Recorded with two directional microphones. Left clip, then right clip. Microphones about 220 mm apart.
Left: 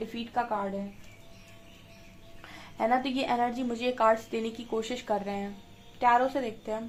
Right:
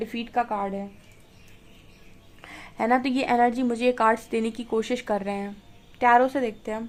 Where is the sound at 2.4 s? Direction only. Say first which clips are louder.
Right 3 dB; 45° right (ahead or behind).